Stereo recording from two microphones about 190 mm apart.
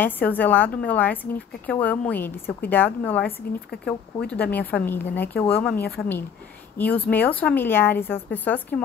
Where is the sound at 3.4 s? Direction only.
55° left (ahead or behind).